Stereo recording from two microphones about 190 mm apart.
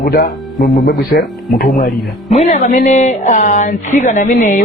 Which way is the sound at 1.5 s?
50° left (ahead or behind).